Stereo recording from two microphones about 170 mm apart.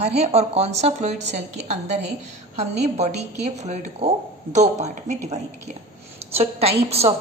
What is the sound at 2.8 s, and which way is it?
Speech, 40° right (ahead or behind).